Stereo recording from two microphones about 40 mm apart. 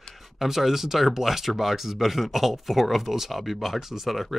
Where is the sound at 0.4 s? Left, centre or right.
Centre.